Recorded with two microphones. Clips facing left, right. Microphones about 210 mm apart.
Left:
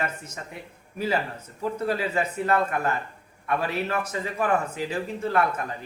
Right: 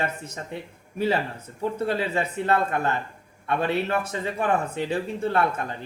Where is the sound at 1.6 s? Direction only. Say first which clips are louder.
Right 1 dB; 25° right (ahead or behind).